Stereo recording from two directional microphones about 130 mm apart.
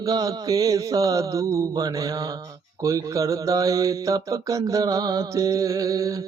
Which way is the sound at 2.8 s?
25° right (ahead or behind).